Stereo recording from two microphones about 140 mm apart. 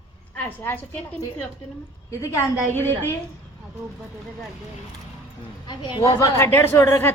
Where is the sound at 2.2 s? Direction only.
15° left (ahead or behind).